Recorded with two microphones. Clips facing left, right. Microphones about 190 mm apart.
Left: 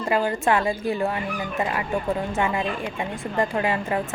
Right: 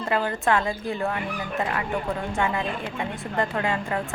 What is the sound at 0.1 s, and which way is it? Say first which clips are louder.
Speech: left 2 dB; 10° left (ahead or behind).